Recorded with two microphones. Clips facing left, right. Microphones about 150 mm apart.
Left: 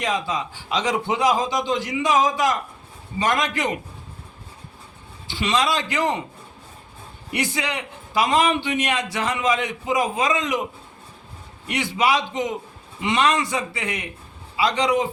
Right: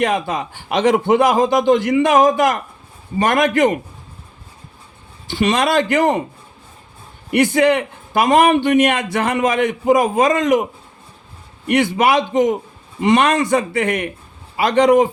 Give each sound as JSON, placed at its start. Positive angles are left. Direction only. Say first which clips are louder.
{"t": 0.0, "sound": "a man's voice", "louder": "right 6 dB", "side_deg": -55}
{"t": 5.3, "sound": "a man's voice", "louder": "right 6 dB", "side_deg": -50}
{"t": 7.3, "sound": "a man's voice", "louder": "right 13 dB", "side_deg": -55}